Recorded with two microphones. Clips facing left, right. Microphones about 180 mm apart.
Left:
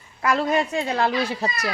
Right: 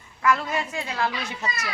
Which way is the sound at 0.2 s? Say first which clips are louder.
Left 3 dB; 35° left (ahead or behind).